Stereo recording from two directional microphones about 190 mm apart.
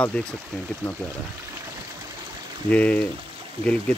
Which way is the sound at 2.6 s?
5° left (ahead or behind).